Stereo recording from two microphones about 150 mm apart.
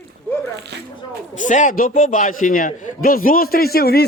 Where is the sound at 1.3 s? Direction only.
60° left (ahead or behind).